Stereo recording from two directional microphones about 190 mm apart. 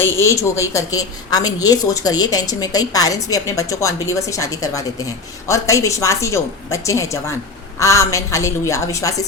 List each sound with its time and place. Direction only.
0.0 s a woman's voice: 15° left (ahead or behind)